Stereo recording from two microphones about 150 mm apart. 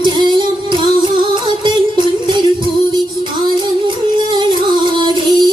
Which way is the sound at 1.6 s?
30° right (ahead or behind).